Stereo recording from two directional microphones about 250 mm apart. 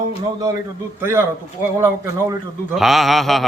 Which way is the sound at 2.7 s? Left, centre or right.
Centre.